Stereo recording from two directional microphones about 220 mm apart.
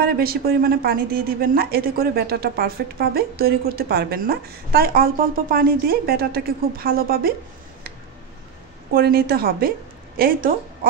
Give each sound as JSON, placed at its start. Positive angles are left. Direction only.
{"t": 0.0, "sound": "speech", "side_deg": -45}
{"t": 8.9, "sound": "speech", "side_deg": -45}